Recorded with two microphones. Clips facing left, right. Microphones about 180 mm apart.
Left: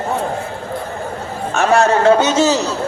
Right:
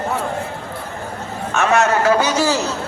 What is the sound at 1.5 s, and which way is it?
A man's voice, 30° left (ahead or behind).